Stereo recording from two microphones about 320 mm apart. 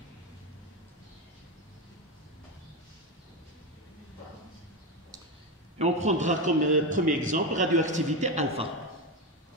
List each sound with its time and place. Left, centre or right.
5.8 s a man's voice: right